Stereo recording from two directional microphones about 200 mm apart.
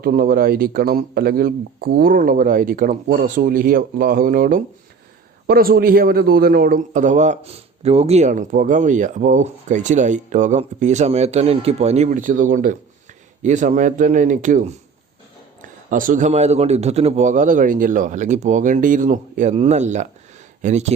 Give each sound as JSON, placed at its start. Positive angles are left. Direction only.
{"t": 0.0, "sound": "a man's voice", "side_deg": -45}
{"t": 15.9, "sound": "a man's voice", "side_deg": -40}